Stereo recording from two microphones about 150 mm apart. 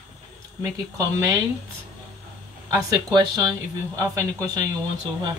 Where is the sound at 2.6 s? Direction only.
25° right (ahead or behind).